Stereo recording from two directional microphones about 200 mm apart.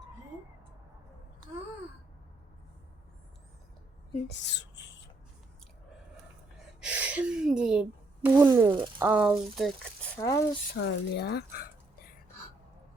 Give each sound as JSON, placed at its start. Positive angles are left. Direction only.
{"t": 4.3, "sound": "a sound", "side_deg": 60}
{"t": 6.8, "sound": "speech", "side_deg": -5}
{"t": 10.2, "sound": "speech", "side_deg": 15}
{"t": 10.7, "sound": "speech", "side_deg": 60}